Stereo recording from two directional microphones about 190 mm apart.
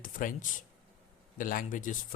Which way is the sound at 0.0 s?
45° left (ahead or behind).